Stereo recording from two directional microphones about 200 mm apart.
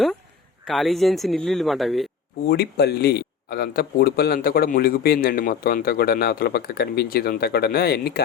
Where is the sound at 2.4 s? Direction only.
50° left (ahead or behind).